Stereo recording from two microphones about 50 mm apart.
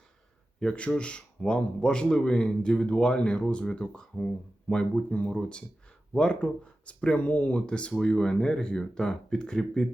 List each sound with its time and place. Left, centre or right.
0.6 s a man's voice: centre
5.0 s a man's voice: left